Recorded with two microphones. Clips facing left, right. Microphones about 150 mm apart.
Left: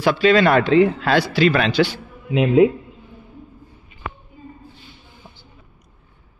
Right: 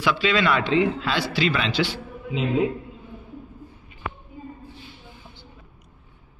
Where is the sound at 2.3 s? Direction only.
75° left (ahead or behind).